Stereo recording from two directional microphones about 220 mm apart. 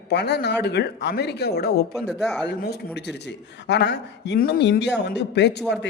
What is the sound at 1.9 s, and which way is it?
Speech, centre (ahead or behind).